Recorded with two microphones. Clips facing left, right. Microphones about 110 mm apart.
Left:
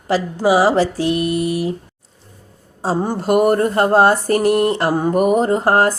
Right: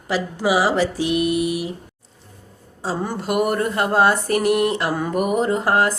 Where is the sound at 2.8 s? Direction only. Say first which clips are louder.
Left 5 dB; 35° left (ahead or behind).